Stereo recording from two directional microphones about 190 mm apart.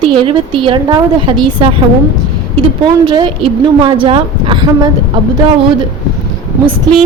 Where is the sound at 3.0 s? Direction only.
25° right (ahead or behind).